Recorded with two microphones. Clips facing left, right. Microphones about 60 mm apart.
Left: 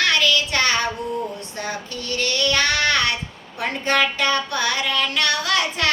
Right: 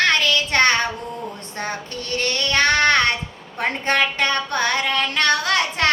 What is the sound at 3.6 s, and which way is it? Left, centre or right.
Music, right.